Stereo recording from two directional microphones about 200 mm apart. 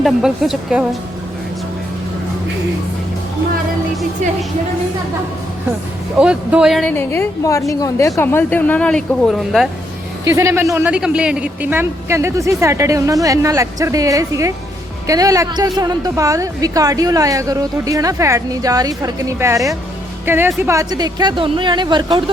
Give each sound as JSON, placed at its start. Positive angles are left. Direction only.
{"t": 0.0, "sound": "a woman's voice", "side_deg": 0}
{"t": 6.1, "sound": "a woman's voice", "side_deg": -5}
{"t": 6.9, "sound": "a woman's voice", "side_deg": 10}
{"t": 10.2, "sound": "a woman's voice", "side_deg": -15}